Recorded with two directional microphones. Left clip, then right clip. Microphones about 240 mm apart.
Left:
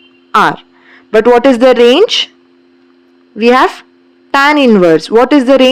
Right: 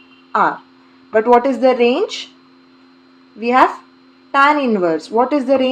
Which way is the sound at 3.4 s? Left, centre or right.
Left.